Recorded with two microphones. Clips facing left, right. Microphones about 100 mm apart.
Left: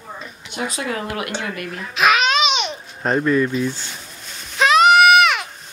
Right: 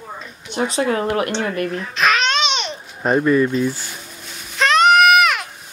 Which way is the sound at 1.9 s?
5° left (ahead or behind).